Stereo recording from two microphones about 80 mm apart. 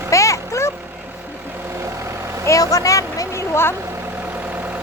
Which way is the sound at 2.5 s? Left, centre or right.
Left.